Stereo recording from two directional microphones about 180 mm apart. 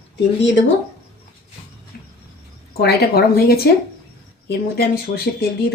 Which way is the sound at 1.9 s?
55° left (ahead or behind).